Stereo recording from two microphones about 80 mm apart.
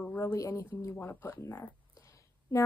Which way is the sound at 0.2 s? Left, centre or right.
Left.